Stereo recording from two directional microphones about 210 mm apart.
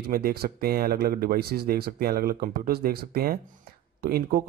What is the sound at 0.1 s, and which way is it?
Speech, 45° right (ahead or behind).